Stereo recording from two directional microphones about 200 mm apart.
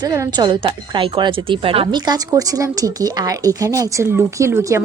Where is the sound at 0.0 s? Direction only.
20° right (ahead or behind).